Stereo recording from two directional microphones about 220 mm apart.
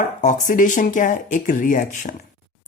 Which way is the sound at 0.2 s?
35° left (ahead or behind).